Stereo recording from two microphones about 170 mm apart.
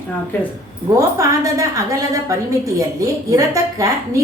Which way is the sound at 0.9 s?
20° right (ahead or behind).